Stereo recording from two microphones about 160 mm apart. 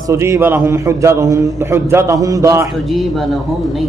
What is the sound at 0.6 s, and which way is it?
Speech, 20° right (ahead or behind).